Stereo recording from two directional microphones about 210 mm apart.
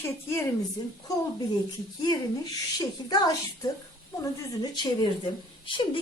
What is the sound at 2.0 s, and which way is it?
A woman's voice, 20° left (ahead or behind).